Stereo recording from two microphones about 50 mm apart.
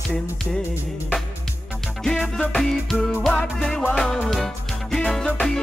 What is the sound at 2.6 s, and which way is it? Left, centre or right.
Music, centre.